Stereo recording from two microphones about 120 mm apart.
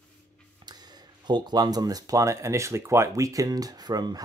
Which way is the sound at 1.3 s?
35° right (ahead or behind).